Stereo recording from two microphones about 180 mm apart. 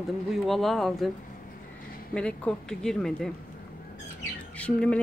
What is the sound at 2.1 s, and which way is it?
Speech, 5° left (ahead or behind).